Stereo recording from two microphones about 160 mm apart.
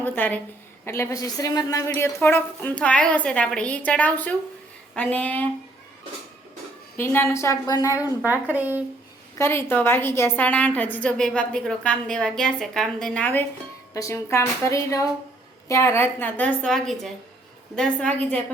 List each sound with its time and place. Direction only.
0.0 s a woman's voice: 10° left (ahead or behind)
6.9 s a woman's voice: 15° left (ahead or behind)
8.2 s a woman's voice: 10° right (ahead or behind)
9.4 s a woman's voice: 15° left (ahead or behind)
13.9 s a woman's voice: 20° left (ahead or behind)